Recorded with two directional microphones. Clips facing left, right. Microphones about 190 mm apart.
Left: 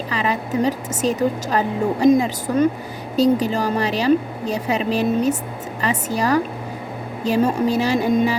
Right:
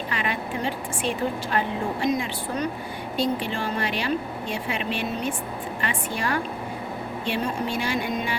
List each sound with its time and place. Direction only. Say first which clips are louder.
0.1 s a woman's voice: left 8 dB; 40° left (ahead or behind)